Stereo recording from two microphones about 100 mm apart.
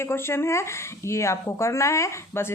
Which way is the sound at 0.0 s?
25° left (ahead or behind).